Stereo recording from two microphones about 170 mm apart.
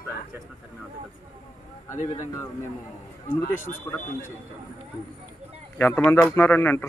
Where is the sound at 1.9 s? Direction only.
45° left (ahead or behind).